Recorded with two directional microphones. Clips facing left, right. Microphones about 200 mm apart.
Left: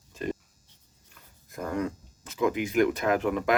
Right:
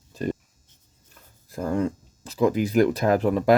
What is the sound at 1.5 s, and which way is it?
Speech, 30° right (ahead or behind).